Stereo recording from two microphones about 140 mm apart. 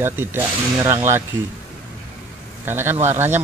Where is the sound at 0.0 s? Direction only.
15° right (ahead or behind).